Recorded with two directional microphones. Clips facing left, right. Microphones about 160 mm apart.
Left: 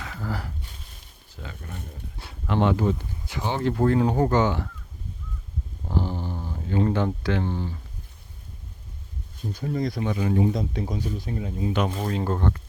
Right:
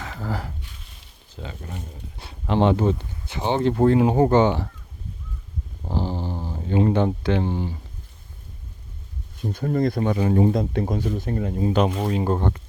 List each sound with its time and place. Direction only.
0.0 s speech: 35° right (ahead or behind)
1.4 s speech: 25° right (ahead or behind)
5.8 s speech: 15° right (ahead or behind)
9.5 s speech: 55° right (ahead or behind)
10.5 s speech: 55° right (ahead or behind)
11.6 s speech: 35° right (ahead or behind)
12.0 s speech: 15° right (ahead or behind)